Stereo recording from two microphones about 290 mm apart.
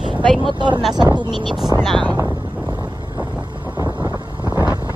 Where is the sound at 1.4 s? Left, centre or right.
Centre.